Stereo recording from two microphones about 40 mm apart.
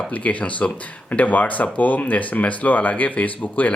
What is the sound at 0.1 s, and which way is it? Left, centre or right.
Speech, left.